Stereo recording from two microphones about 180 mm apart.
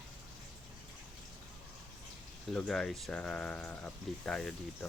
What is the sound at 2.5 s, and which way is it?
Speech, 5° left (ahead or behind).